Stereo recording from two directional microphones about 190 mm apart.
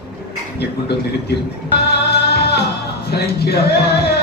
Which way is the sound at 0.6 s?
60° left (ahead or behind).